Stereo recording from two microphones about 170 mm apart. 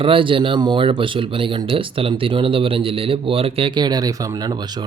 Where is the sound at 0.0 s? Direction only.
30° right (ahead or behind).